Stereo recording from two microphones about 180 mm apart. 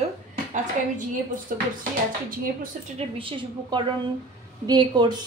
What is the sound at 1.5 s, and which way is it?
Speech, 50° right (ahead or behind).